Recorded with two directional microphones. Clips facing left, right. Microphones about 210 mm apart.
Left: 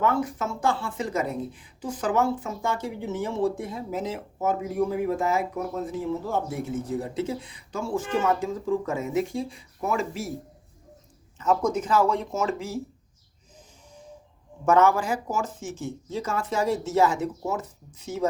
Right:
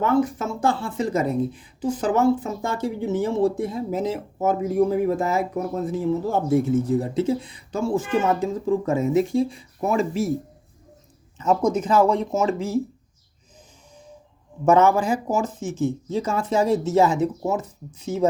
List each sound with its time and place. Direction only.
0.0 s speech: 30° right (ahead or behind)
11.3 s speech: 20° right (ahead or behind)
14.6 s speech: 20° right (ahead or behind)